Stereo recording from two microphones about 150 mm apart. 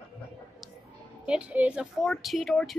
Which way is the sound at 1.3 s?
10° right (ahead or behind).